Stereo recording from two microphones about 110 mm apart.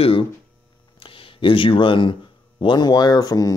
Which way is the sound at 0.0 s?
55° left (ahead or behind).